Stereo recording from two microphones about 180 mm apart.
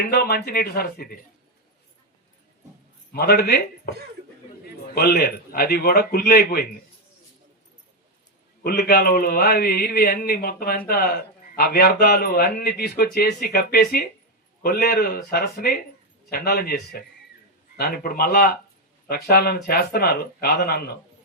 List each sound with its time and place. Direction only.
0.1 s a man's voice: 60° left (ahead or behind)
3.1 s a man's voice: 60° left (ahead or behind)
4.9 s a man's voice: 60° left (ahead or behind)
8.6 s a man's voice: 60° left (ahead or behind)